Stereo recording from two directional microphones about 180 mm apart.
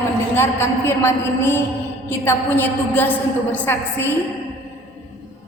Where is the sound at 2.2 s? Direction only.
10° left (ahead or behind).